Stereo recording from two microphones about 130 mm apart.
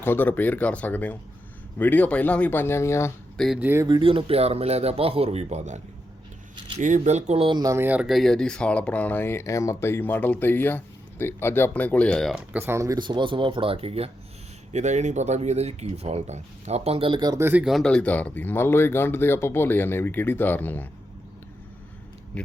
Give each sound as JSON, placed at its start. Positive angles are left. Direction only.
{"t": 0.0, "sound": "speech", "side_deg": 15}
{"t": 3.3, "sound": "speech", "side_deg": 0}
{"t": 3.6, "sound": "speech", "side_deg": -15}
{"t": 3.8, "sound": "speech", "side_deg": -40}
{"t": 7.6, "sound": "speech", "side_deg": -25}
{"t": 7.9, "sound": "speech", "side_deg": -5}
{"t": 12.5, "sound": "speech", "side_deg": -20}
{"t": 14.7, "sound": "speech", "side_deg": -60}
{"t": 17.2, "sound": "speech", "side_deg": -30}
{"t": 17.4, "sound": "speech", "side_deg": -15}
{"t": 17.7, "sound": "speech", "side_deg": 5}
{"t": 22.3, "sound": "speech", "side_deg": 10}